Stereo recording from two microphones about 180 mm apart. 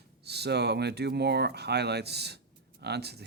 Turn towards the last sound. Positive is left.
turn(degrees=-65)  # may be behind; listen again after turning